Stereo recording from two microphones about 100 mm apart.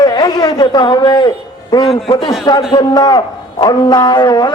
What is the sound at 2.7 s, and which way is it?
A man's voice, 45° left (ahead or behind).